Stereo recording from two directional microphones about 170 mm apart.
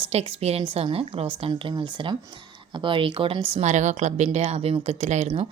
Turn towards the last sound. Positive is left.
turn(degrees=-40)  # may be behind; listen again after turning